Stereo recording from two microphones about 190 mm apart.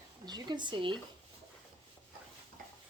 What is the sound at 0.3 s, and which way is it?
Speech, 20° right (ahead or behind).